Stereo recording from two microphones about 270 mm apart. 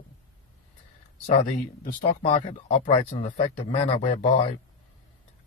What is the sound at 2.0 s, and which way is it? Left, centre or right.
Speech, left.